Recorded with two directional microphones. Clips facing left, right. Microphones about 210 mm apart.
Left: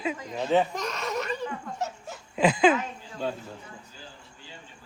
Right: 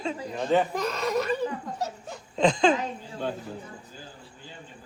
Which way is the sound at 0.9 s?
35° right (ahead or behind).